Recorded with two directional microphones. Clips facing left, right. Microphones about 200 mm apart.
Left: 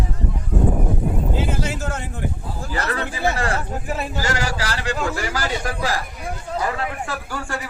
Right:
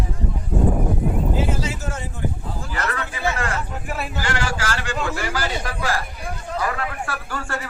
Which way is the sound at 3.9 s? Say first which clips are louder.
Left 3 dB; 20° left (ahead or behind).